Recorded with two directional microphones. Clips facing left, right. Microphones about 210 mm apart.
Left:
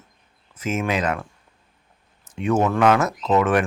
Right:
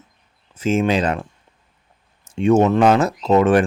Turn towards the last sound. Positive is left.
turn(degrees=-30)  # may be behind; listen again after turning